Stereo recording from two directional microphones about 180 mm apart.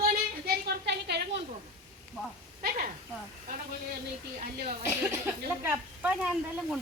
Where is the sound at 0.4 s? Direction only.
65° right (ahead or behind).